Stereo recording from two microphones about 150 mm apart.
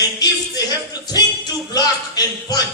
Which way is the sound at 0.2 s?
25° left (ahead or behind).